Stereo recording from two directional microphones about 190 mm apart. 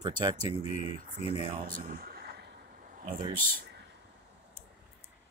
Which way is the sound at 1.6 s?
45° right (ahead or behind).